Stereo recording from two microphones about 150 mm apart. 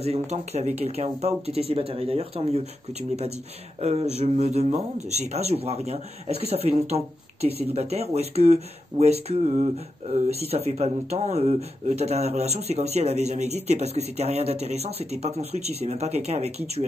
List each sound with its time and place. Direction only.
0.0 s speech: 45° right (ahead or behind)